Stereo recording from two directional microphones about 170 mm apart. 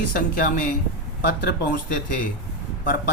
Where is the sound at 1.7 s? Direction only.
55° left (ahead or behind).